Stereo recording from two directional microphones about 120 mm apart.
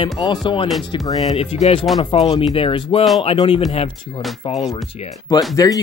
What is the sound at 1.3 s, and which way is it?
Speech, 65° left (ahead or behind).